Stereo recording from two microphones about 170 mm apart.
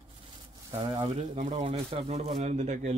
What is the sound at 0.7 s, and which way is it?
Speech, 25° right (ahead or behind).